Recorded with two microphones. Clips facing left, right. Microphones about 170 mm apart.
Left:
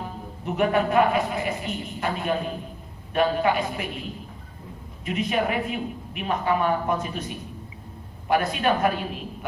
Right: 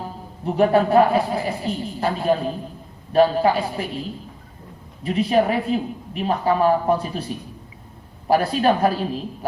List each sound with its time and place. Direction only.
0.0 s a woman's voice: 35° right (ahead or behind)
5.0 s a woman's voice: 35° right (ahead or behind)